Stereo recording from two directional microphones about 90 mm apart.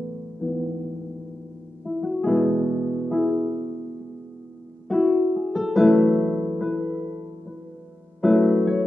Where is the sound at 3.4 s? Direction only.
25° right (ahead or behind).